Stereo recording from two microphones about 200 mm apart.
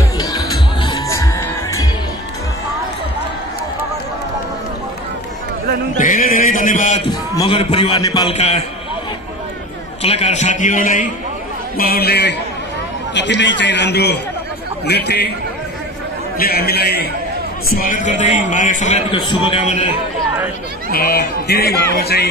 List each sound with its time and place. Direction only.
0.3 s music: 20° left (ahead or behind)
5.9 s a sound: 45° left (ahead or behind)
7.1 s a man's voice: 25° left (ahead or behind)
8.4 s a man's voice: 30° left (ahead or behind)
10.0 s a man's voice: 30° left (ahead or behind); by 15.3 s 55° left (ahead or behind)
16.3 s a man's voice: 50° left (ahead or behind); by 19.1 s 35° left (ahead or behind)
19.1 s a man's voice: 25° left (ahead or behind)
19.6 s a man's voice: 35° left (ahead or behind)
20.9 s speech: 50° left (ahead or behind)